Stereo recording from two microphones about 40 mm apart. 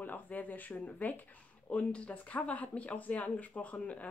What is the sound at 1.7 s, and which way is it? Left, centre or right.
Speech, left.